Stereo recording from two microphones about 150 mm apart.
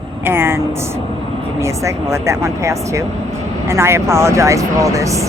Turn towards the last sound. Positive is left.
turn(degrees=-20)  # may be behind; listen again after turning